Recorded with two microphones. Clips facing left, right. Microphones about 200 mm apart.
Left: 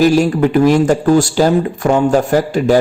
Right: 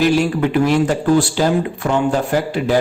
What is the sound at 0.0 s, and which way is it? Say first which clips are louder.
Speech: left 4 dB; 40° left (ahead or behind).